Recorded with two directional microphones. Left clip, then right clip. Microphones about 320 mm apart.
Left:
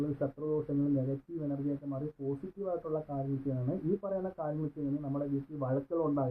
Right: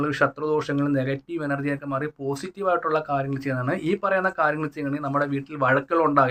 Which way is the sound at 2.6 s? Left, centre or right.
Right.